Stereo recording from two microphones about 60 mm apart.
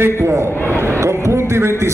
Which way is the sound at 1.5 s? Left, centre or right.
Right.